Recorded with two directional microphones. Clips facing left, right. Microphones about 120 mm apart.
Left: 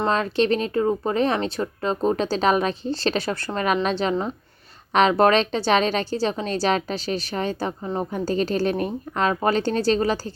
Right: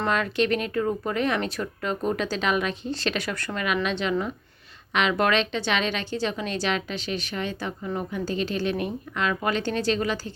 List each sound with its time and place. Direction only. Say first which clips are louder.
0.0 s speech: left 3 dB; 30° left (ahead or behind)